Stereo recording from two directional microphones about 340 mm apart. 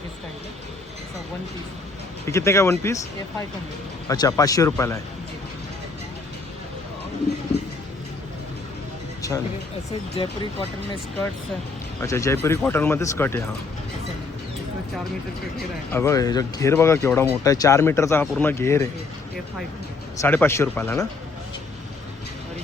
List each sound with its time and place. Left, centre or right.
2.2 s speech: centre
4.1 s speech: centre
9.2 s vehicle: centre
10.2 s speech: centre
12.0 s speech: centre
15.9 s speech: centre
20.2 s speech: centre